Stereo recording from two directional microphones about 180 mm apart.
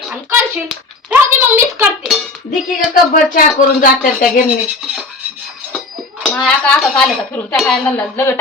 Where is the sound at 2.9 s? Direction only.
50° left (ahead or behind).